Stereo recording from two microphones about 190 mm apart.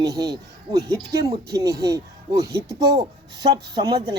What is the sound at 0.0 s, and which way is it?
Speech, 20° right (ahead or behind).